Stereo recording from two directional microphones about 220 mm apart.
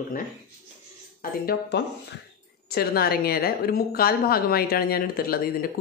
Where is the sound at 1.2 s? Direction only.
40° left (ahead or behind).